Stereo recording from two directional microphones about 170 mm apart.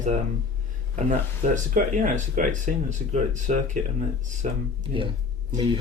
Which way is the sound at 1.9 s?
50° right (ahead or behind).